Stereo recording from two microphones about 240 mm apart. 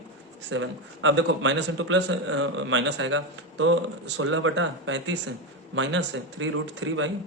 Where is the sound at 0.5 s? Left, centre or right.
Right.